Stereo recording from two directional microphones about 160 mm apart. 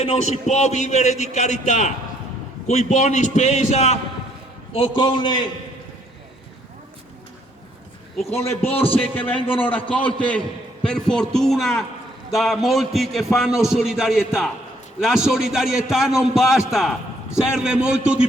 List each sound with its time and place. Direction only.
0.0 s a man's voice: 45° left (ahead or behind)
4.7 s a man's voice: 30° left (ahead or behind)
8.4 s a man's voice: 15° left (ahead or behind); by 18.3 s 5° right (ahead or behind)